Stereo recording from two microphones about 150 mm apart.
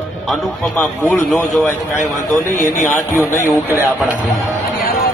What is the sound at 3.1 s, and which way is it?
Speech, 20° left (ahead or behind).